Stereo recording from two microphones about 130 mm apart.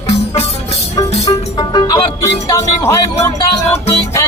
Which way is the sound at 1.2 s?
30° left (ahead or behind).